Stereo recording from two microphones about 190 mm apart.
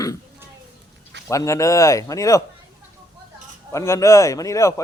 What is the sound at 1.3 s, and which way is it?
A man's voice, 15° left (ahead or behind).